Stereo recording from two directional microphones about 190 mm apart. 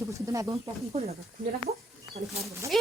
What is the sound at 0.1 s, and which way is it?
Speech, 15° right (ahead or behind).